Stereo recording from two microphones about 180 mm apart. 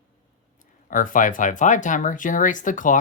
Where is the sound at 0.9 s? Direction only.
50° left (ahead or behind).